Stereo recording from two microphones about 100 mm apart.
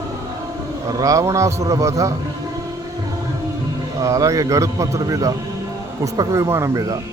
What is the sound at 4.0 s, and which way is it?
A man's voice, 30° right (ahead or behind).